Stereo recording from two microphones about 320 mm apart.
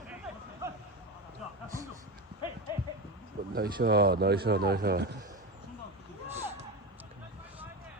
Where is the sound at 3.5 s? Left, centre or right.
Right.